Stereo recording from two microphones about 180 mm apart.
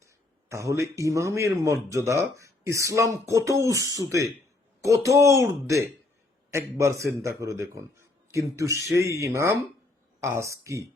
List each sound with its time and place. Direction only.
0.4 s a man's voice: 15° right (ahead or behind)